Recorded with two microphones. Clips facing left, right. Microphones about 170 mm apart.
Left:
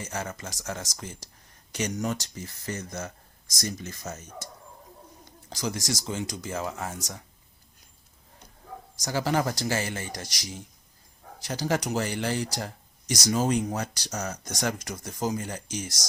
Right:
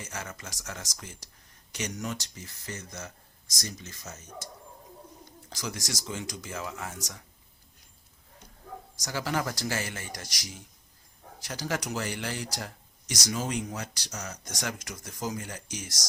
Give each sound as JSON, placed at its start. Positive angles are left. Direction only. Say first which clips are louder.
{"t": 0.0, "sound": "speech", "louder": "left 6 dB", "side_deg": 35}
{"t": 5.5, "sound": "speech", "louder": "left 6 dB", "side_deg": 30}
{"t": 9.0, "sound": "speech", "louder": "left 5 dB", "side_deg": 30}
{"t": 14.6, "sound": "speech", "louder": "left 6 dB", "side_deg": 35}